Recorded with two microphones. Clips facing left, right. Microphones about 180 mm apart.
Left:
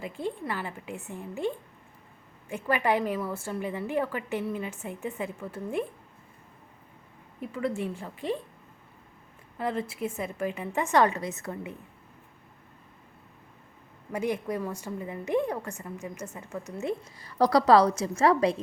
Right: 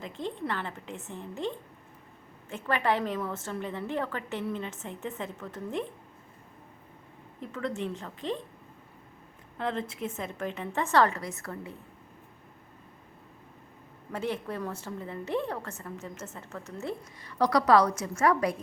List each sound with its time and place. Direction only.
0.0 s a woman's voice: 10° left (ahead or behind)
7.3 s a woman's voice: 10° left (ahead or behind)
9.6 s a woman's voice: 10° left (ahead or behind)
14.1 s a woman's voice: 15° left (ahead or behind)
17.2 s a woman's voice: 35° left (ahead or behind)